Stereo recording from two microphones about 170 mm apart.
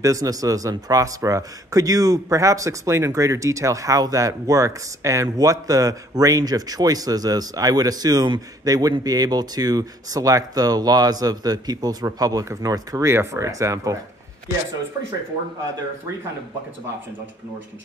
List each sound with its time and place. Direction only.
0.0 s speech: 20° right (ahead or behind)